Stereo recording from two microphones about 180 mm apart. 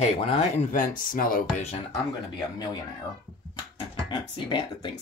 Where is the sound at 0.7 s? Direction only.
50° left (ahead or behind).